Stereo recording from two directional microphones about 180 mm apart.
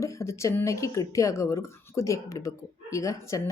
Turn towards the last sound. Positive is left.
turn(degrees=15)  # may be behind; listen again after turning